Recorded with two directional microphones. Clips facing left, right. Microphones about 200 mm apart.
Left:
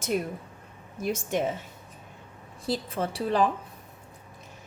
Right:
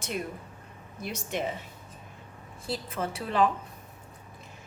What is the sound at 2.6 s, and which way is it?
Speech, 35° left (ahead or behind).